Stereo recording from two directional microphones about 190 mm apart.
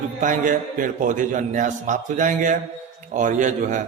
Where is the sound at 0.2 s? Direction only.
45° right (ahead or behind).